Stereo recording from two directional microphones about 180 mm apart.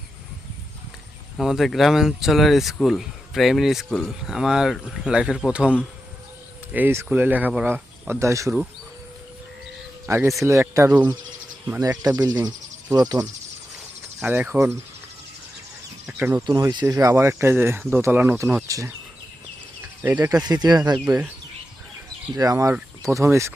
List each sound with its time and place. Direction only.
1.4 s speech: centre (ahead or behind)
6.7 s speech: 15° right (ahead or behind)
10.1 s speech: 15° right (ahead or behind)
14.2 s speech: 10° right (ahead or behind)
16.5 s speech: 20° right (ahead or behind)
20.0 s speech: 10° right (ahead or behind)
20.3 s speech: 20° right (ahead or behind)
22.4 s speech: 20° right (ahead or behind)